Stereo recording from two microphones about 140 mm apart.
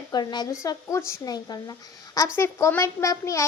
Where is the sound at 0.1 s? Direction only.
30° left (ahead or behind).